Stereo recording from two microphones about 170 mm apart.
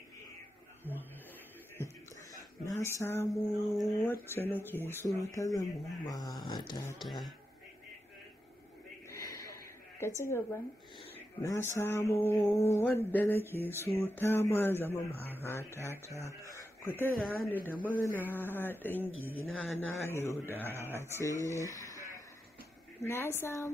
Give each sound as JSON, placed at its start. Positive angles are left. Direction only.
{"t": 0.8, "sound": "mantra", "side_deg": 10}
{"t": 2.6, "sound": "mantra", "side_deg": 15}
{"t": 3.7, "sound": "speech", "side_deg": 0}
{"t": 4.1, "sound": "speech", "side_deg": 10}
{"t": 7.0, "sound": "speech", "side_deg": 0}
{"t": 9.9, "sound": "mantra", "side_deg": 15}
{"t": 16.5, "sound": "speech", "side_deg": 15}
{"t": 17.6, "sound": "mantra", "side_deg": 10}
{"t": 21.2, "sound": "speech", "side_deg": 20}
{"t": 23.0, "sound": "mantra", "side_deg": 15}